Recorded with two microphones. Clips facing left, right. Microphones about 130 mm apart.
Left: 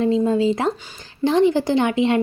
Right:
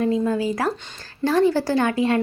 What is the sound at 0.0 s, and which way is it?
Speech, 25° left (ahead or behind).